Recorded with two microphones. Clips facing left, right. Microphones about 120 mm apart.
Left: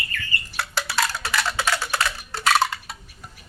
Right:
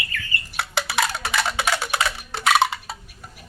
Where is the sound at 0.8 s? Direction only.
20° right (ahead or behind).